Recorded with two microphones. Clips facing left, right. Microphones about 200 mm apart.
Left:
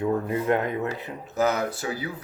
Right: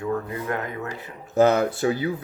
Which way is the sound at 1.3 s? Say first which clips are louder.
Right 6 dB; 30° right (ahead or behind).